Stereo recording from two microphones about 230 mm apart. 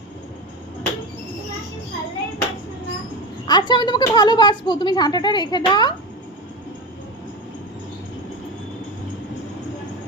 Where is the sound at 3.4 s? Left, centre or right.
Centre.